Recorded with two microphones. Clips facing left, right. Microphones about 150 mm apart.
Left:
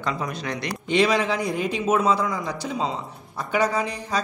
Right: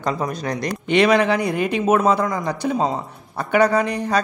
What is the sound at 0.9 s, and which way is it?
A man's voice, 60° right (ahead or behind).